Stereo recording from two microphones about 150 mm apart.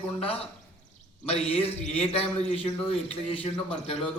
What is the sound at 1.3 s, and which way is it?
A man's voice, 40° left (ahead or behind).